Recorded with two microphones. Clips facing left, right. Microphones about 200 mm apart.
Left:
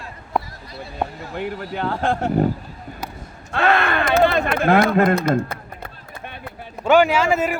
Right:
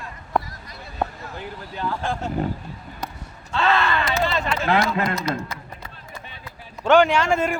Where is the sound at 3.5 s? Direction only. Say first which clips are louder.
Left 2 dB; 55° left (ahead or behind).